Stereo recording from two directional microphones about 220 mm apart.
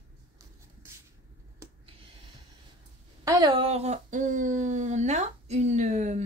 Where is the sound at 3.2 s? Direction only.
15° right (ahead or behind).